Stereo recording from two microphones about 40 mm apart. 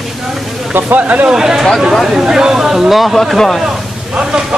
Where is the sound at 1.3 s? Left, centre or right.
Centre.